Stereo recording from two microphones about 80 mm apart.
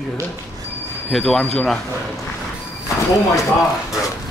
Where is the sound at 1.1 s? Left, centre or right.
Centre.